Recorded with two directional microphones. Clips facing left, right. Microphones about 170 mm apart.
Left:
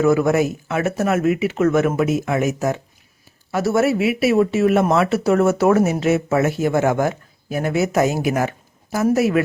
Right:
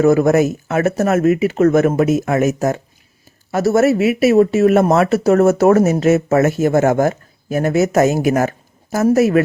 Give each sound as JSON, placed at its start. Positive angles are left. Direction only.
{"t": 0.0, "sound": "speech", "side_deg": -40}